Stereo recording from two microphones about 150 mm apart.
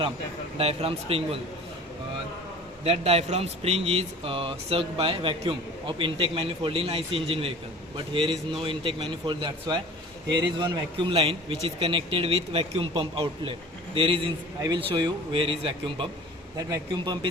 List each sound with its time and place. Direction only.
0.5 s a man's voice: 40° right (ahead or behind)
2.8 s a man's voice: 40° right (ahead or behind)
16.6 s speech: 25° right (ahead or behind)